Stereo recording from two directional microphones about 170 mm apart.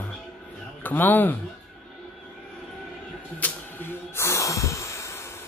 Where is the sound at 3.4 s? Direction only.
10° left (ahead or behind).